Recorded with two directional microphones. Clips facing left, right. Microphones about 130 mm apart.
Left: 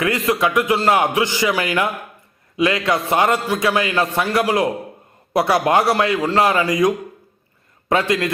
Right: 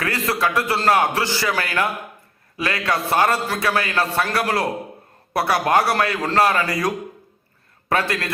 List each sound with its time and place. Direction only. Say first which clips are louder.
0.0 s a man's voice: left 4 dB; 20° left (ahead or behind)